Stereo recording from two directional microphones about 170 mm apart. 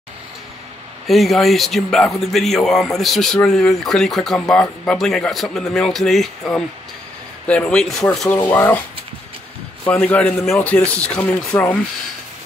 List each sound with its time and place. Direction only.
1.0 s speech: centre (ahead or behind)
8.4 s speech: 15° left (ahead or behind)
9.8 s speech: 10° left (ahead or behind)